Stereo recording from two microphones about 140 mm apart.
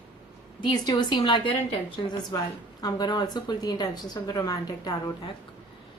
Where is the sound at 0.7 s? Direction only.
30° left (ahead or behind).